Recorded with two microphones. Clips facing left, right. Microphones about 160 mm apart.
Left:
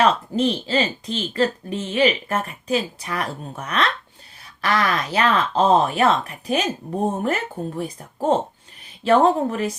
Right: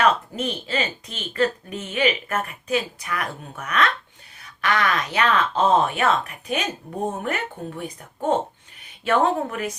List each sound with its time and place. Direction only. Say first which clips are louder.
0.0 s speech: left 3 dB; 30° left (ahead or behind)